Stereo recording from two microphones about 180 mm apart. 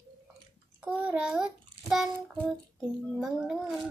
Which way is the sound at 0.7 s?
5° right (ahead or behind).